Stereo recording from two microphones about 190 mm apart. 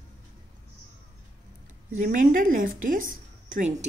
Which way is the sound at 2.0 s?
45° right (ahead or behind).